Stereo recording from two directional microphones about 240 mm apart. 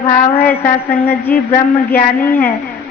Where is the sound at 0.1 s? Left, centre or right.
Left.